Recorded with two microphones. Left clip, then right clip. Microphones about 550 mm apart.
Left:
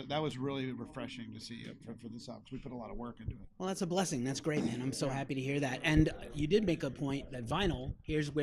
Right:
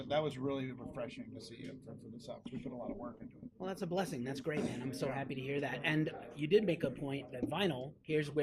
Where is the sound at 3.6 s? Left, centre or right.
Left.